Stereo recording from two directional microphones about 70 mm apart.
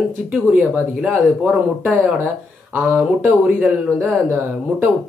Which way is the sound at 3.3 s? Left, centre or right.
Centre.